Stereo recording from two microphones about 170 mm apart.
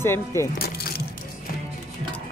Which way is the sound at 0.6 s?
65° left (ahead or behind).